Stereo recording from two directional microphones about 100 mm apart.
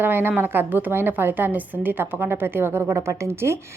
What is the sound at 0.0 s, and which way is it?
A woman's voice, 20° right (ahead or behind).